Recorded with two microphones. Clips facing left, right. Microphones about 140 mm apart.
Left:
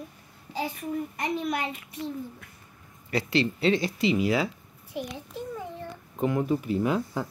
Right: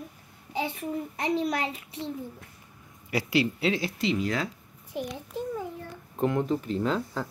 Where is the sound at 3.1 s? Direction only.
10° right (ahead or behind); by 5.0 s 5° left (ahead or behind).